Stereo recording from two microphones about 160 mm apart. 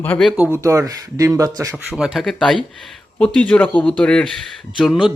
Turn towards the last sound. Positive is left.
turn(degrees=0)  # may be behind; listen again after turning